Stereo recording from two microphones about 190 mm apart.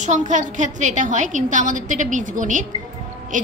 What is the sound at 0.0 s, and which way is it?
A woman's voice, 40° right (ahead or behind).